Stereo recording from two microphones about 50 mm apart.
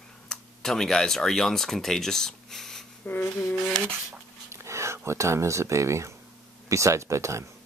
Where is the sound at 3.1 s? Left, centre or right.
Left.